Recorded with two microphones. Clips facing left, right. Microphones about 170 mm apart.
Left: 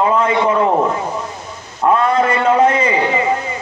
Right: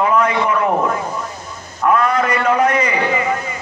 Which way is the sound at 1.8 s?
25° left (ahead or behind).